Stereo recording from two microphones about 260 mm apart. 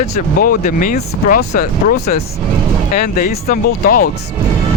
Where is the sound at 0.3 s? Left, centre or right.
Left.